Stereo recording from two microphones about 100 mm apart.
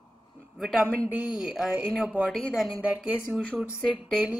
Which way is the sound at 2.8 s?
10° right (ahead or behind).